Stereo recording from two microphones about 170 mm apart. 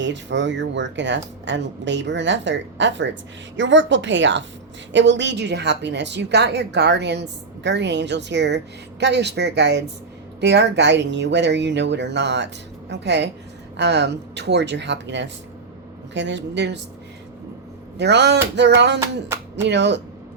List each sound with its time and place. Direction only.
0.0 s a woman's voice: 90° right
17.9 s a woman's voice: 90° right
18.9 s speech: 15° right (ahead or behind)
19.6 s a woman's voice: 90° right